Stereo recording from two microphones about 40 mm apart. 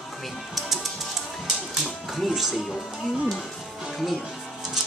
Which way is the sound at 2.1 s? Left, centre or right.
Centre.